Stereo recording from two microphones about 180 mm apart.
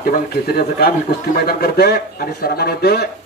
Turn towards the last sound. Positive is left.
turn(degrees=60)  # may be behind; listen again after turning